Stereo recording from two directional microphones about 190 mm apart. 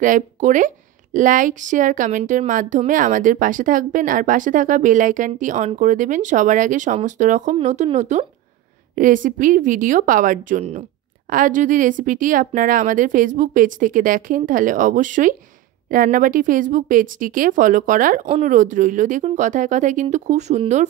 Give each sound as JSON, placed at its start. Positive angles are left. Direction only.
{"t": 0.0, "sound": "speech", "side_deg": -40}
{"t": 18.2, "sound": "speech", "side_deg": -35}